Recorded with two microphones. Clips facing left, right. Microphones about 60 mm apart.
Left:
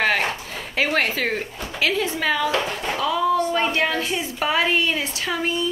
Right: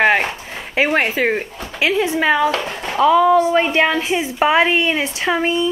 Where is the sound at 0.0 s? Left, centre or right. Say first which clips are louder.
Right 6 dB; right.